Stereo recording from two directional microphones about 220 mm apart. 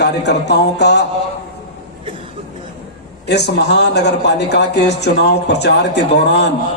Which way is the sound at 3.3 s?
50° left (ahead or behind).